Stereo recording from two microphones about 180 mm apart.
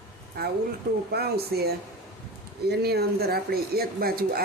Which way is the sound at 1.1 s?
60° right (ahead or behind).